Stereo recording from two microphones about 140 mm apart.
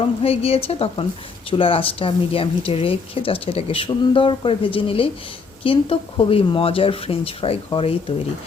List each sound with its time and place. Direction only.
0.2 s a woman's voice: 45° left (ahead or behind)